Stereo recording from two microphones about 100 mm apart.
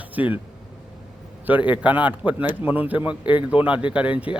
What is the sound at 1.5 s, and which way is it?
A man's voice, 15° right (ahead or behind).